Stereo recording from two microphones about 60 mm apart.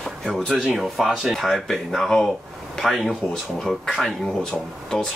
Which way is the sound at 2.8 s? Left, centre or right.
Centre.